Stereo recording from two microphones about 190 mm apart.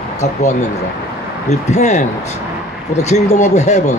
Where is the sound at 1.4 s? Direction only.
35° left (ahead or behind).